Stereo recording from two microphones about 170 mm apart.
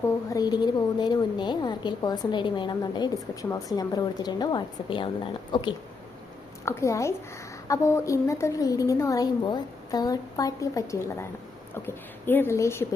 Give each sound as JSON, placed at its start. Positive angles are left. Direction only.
{"t": 0.3, "sound": "a woman's voice", "side_deg": 25}
{"t": 6.7, "sound": "a woman's voice", "side_deg": 15}